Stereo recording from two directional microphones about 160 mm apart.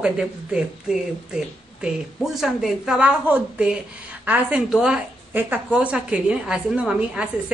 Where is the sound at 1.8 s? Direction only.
5° right (ahead or behind).